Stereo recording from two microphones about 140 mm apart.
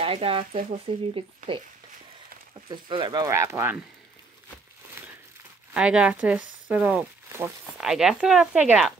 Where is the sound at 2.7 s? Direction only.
35° right (ahead or behind).